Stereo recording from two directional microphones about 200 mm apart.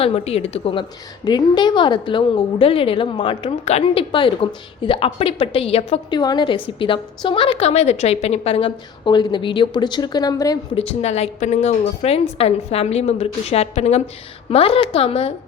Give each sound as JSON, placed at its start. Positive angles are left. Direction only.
{"t": 0.0, "sound": "a woman's voice", "side_deg": 30}
{"t": 10.8, "sound": "a woman's voice", "side_deg": 30}